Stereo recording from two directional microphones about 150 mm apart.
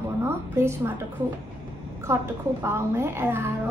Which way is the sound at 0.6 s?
15° right (ahead or behind).